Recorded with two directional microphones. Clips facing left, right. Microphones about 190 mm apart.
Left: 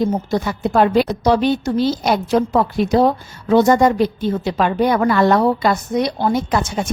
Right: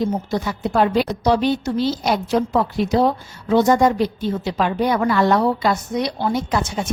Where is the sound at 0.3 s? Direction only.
50° left (ahead or behind).